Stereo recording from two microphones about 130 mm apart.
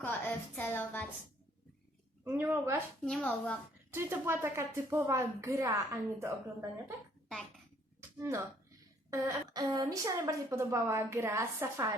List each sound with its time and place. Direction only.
0.0 s a woman's voice: 15° left (ahead or behind)
2.2 s a woman's voice: 20° right (ahead or behind)
3.0 s a woman's voice: 5° left (ahead or behind)
3.9 s a woman's voice: 20° right (ahead or behind)
9.0 s a woman's voice: 25° right (ahead or behind)